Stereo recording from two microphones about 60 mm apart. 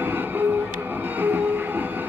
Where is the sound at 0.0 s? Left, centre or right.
Right.